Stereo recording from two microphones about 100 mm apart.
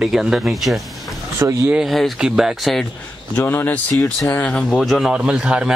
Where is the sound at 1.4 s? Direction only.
30° right (ahead or behind).